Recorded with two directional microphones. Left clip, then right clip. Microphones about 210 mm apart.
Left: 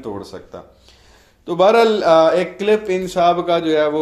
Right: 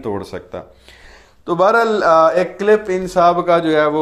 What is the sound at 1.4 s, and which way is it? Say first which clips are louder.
Speech: left 1 dB; 10° right (ahead or behind).